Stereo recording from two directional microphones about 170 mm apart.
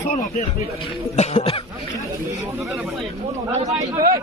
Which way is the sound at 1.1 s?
35° left (ahead or behind).